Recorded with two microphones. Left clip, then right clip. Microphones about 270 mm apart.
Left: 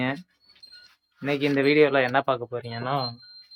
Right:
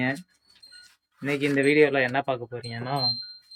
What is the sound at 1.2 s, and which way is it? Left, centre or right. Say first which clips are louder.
Speech: left 1 dB; centre.